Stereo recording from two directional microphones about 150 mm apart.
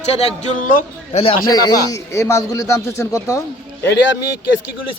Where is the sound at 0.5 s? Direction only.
60° left (ahead or behind).